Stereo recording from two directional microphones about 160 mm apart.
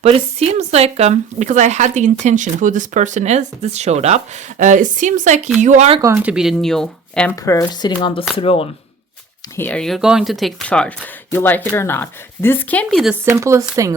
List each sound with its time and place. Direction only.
0.0 s speech: 40° right (ahead or behind)
6.0 s speech: 15° right (ahead or behind); by 7.3 s 5° left (ahead or behind)
7.4 s speech: 20° left (ahead or behind)
9.6 s speech: 10° left (ahead or behind)
13.2 s speech: 15° right (ahead or behind)